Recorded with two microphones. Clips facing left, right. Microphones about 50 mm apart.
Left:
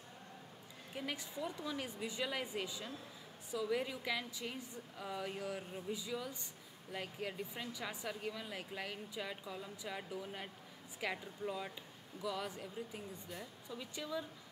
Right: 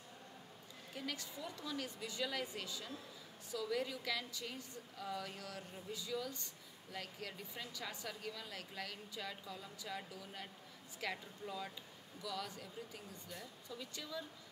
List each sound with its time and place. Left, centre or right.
0.9 s speech: centre